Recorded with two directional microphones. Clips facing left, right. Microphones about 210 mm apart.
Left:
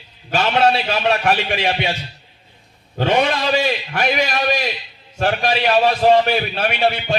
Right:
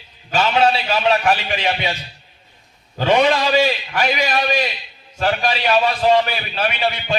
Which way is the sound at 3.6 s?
50° left (ahead or behind).